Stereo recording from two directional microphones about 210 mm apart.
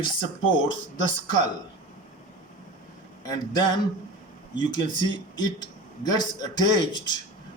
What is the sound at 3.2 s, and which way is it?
Speech, 20° left (ahead or behind).